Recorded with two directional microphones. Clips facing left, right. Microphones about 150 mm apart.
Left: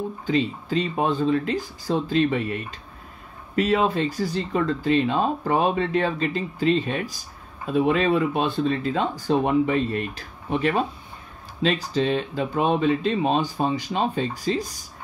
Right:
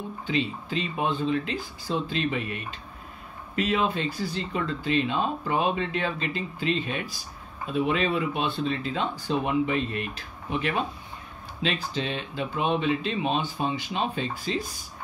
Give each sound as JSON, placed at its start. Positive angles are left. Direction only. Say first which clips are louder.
{"t": 0.3, "sound": "speech", "louder": "left 5 dB", "side_deg": 40}
{"t": 3.5, "sound": "speech", "louder": "left 5 dB", "side_deg": 40}